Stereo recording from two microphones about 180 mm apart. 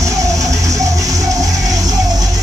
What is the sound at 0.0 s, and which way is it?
Music, 15° right (ahead or behind).